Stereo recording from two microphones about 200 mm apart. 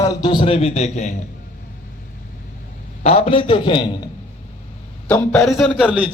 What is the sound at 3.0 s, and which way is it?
Speech, 30° left (ahead or behind).